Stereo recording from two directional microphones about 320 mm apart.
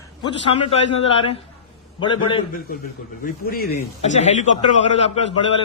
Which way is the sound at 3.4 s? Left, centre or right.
Left.